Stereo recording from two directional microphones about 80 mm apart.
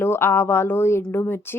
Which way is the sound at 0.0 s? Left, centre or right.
Left.